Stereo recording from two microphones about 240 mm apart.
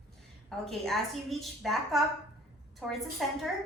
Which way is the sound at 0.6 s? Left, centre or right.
Centre.